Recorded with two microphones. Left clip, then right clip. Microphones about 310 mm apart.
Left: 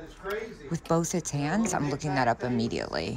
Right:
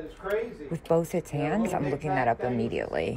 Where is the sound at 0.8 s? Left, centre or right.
Centre.